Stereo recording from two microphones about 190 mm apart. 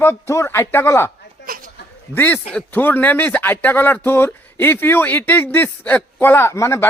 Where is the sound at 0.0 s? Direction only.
15° left (ahead or behind).